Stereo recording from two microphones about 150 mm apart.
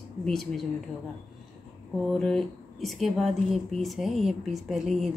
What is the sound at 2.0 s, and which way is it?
Speech, centre (ahead or behind).